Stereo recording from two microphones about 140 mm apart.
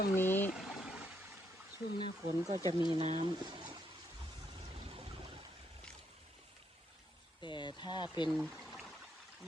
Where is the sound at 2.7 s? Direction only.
35° right (ahead or behind).